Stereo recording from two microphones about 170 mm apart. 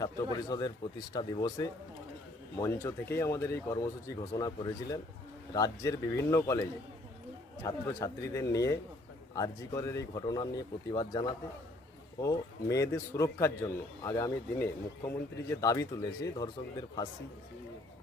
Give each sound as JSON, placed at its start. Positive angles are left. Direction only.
{"t": 0.0, "sound": "a man's voice", "side_deg": 25}